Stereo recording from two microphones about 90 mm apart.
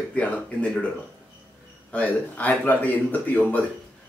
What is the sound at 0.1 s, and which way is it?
Speech, 15° left (ahead or behind).